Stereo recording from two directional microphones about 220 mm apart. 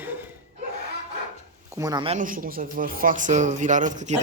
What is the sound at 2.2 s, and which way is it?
A man's voice, 40° right (ahead or behind).